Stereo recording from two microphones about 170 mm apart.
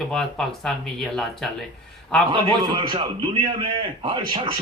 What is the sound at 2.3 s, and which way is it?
A man's voice, 30° right (ahead or behind).